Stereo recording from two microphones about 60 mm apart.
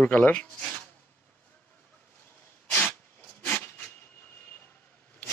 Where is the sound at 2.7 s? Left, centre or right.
Left.